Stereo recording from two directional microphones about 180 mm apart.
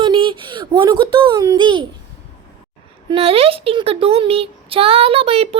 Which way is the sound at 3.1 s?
30° right (ahead or behind).